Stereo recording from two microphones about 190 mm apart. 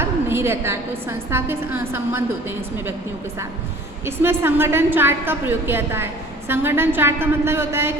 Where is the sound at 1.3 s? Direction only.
10° right (ahead or behind).